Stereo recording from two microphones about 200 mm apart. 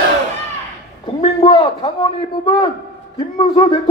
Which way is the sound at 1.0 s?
25° left (ahead or behind).